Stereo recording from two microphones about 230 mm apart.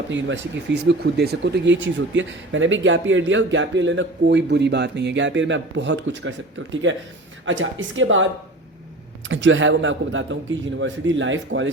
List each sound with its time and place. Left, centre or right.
0.1 s speech: right
9.3 s speech: right